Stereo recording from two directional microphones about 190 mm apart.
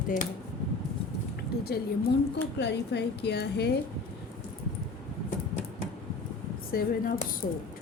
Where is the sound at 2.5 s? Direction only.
65° left (ahead or behind).